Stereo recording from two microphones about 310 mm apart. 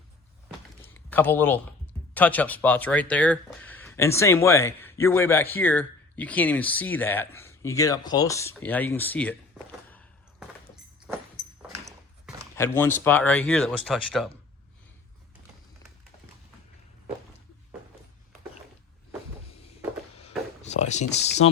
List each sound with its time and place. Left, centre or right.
0.9 s speech: centre
9.9 s machine gun: centre
11.7 s a sound: centre
12.5 s speech: centre
20.6 s speech: left